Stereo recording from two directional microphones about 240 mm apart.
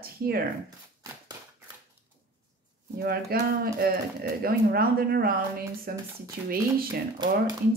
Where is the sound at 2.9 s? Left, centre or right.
Right.